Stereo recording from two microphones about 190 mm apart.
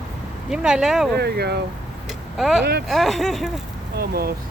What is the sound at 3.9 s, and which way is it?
Speech, 55° right (ahead or behind).